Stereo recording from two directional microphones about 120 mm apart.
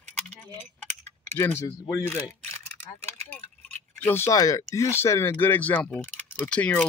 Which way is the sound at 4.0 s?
20° left (ahead or behind).